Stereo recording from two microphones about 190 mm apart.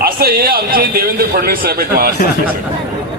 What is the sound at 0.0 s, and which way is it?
A man's voice, 50° right (ahead or behind).